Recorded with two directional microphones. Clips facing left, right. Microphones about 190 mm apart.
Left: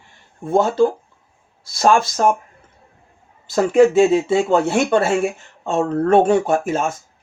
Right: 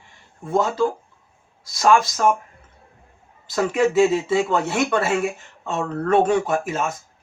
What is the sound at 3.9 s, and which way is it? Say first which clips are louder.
Speech: left 3 dB; 30° left (ahead or behind).